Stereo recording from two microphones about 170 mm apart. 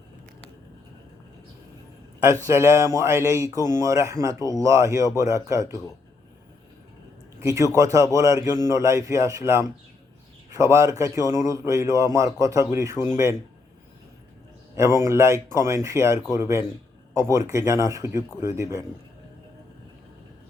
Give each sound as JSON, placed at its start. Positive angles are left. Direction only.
{"t": 2.5, "sound": "speech", "side_deg": -15}
{"t": 7.3, "sound": "speech", "side_deg": -20}
{"t": 14.9, "sound": "speech", "side_deg": -15}